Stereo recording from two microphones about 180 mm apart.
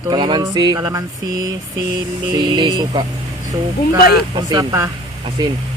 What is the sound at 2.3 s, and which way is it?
Speech, 25° right (ahead or behind).